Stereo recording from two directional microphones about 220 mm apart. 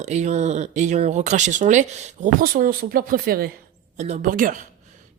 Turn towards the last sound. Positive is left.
turn(degrees=-35)  # may be behind; listen again after turning